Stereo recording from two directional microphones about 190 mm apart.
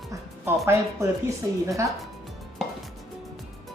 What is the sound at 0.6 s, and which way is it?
Speech, 15° right (ahead or behind).